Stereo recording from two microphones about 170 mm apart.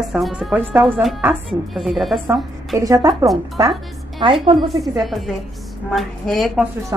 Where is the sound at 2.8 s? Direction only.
20° right (ahead or behind).